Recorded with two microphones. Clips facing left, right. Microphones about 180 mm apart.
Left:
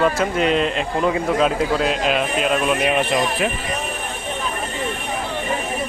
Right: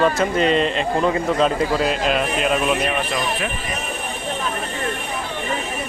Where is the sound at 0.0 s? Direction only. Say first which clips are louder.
Right 1 dB; 5° left (ahead or behind).